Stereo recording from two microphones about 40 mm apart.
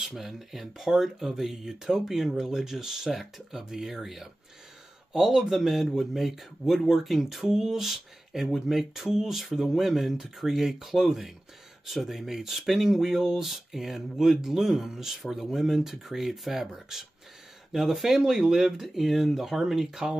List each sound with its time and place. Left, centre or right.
0.0 s speech: centre